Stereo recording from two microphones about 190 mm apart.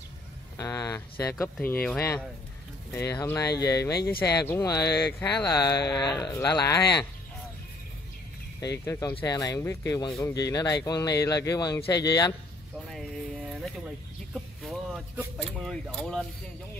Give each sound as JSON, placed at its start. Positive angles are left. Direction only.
{"t": 0.6, "sound": "speech", "side_deg": 15}
{"t": 8.5, "sound": "speech", "side_deg": 15}
{"t": 13.6, "sound": "a sound", "side_deg": 0}
{"t": 15.3, "sound": "speech", "side_deg": 0}